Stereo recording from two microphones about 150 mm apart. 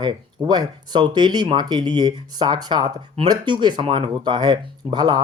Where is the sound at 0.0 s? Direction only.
30° right (ahead or behind).